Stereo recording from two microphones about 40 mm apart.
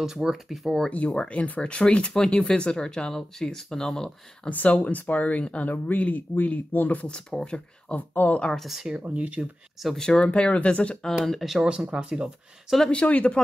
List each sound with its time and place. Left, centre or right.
0.0 s speech: centre
0.8 s speech: left
4.6 s speech: left
4.9 s speech: left
5.9 s speech: left
7.3 s speech: centre
7.9 s speech: left
8.6 s speech: centre
8.9 s speech: right
9.9 s speech: left
11.2 s speech: centre
11.6 s speech: right
12.8 s speech: left